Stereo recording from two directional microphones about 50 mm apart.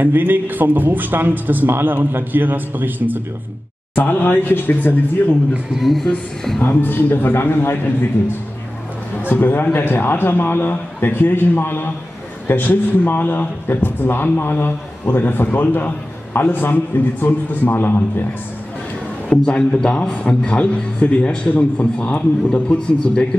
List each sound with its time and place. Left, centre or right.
0.0 s a man's voice: right
3.9 s a man's voice: left
5.7 s speech: centre
6.0 s a woman's voice: centre
6.6 s speech: left
9.3 s a man's voice: left
19.2 s a man's voice: left